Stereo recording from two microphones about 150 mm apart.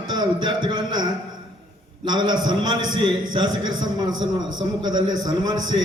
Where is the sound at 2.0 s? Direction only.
30° right (ahead or behind).